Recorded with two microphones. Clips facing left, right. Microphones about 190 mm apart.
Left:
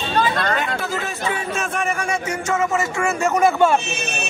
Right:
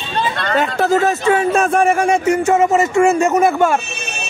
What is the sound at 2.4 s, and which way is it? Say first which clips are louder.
Speech: right 7 dB; 35° right (ahead or behind).